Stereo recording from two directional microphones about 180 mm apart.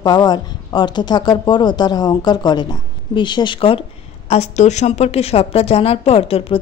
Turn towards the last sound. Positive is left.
turn(degrees=30)  # may be behind; listen again after turning